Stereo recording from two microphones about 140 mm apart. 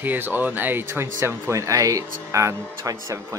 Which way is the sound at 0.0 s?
15° right (ahead or behind).